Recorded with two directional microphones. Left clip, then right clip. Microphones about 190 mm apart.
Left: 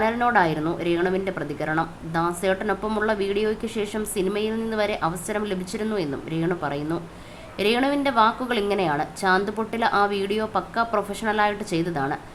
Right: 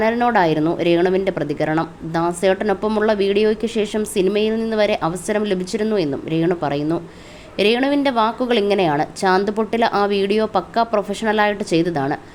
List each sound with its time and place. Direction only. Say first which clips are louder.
0.0 s speech: right 4 dB; 30° right (ahead or behind)